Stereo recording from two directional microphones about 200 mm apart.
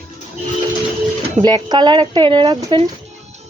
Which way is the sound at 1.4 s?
20° right (ahead or behind).